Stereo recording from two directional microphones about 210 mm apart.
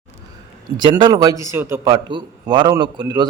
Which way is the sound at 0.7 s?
20° right (ahead or behind).